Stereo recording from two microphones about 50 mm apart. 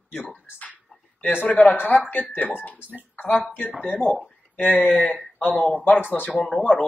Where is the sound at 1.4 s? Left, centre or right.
Left.